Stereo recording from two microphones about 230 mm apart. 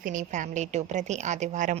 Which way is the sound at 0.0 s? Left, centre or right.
Right.